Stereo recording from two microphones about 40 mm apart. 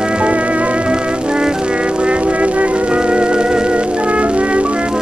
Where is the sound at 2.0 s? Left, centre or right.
Right.